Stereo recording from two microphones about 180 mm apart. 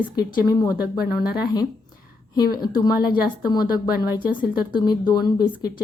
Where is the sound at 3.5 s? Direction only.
20° left (ahead or behind).